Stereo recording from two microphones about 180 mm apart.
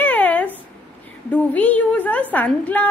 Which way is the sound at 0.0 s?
10° left (ahead or behind).